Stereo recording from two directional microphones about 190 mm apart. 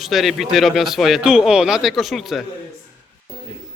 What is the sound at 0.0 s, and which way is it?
Speech, centre (ahead or behind).